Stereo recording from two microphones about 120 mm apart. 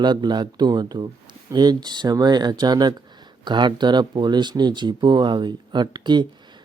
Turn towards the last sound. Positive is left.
turn(degrees=-40)  # may be behind; listen again after turning